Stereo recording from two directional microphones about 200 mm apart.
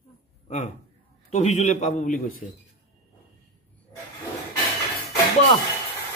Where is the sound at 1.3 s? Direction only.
35° left (ahead or behind).